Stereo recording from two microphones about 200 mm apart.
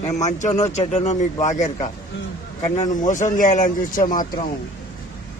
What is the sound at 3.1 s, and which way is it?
A man's voice, 40° left (ahead or behind).